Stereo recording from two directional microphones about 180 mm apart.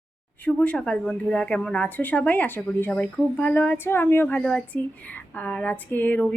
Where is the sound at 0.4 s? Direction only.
5° left (ahead or behind).